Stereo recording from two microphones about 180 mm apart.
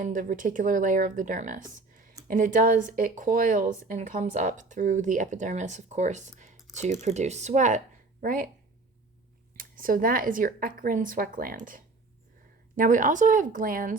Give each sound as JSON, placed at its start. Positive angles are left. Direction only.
{"t": 0.0, "sound": "speech", "side_deg": -45}
{"t": 9.6, "sound": "speech", "side_deg": -50}